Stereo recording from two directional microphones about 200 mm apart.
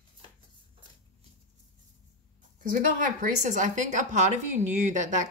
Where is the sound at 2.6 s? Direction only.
45° right (ahead or behind).